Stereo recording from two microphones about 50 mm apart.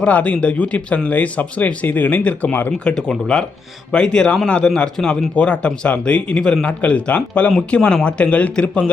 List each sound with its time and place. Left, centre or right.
0.0 s speech: left
2.9 s a man's voice: centre
6.7 s speech: left
7.8 s a man's voice: centre
8.0 s speech: left